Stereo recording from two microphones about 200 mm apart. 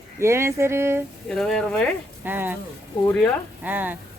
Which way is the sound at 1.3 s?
5° left (ahead or behind).